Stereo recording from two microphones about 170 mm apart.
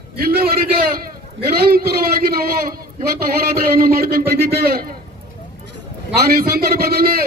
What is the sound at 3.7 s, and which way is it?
A man's voice, 65° right (ahead or behind).